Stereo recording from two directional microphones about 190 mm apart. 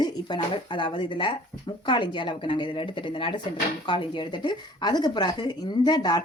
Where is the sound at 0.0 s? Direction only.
25° left (ahead or behind).